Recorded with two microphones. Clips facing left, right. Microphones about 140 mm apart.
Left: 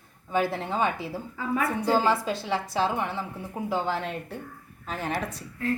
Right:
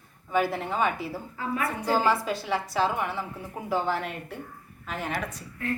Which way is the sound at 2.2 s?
25° left (ahead or behind).